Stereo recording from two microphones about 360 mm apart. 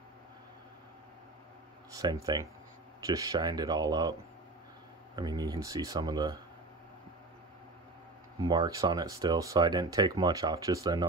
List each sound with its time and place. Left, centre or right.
2.0 s speech: centre
8.4 s speech: centre